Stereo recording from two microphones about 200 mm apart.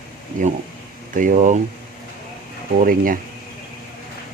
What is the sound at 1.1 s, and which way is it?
Speech, 40° right (ahead or behind).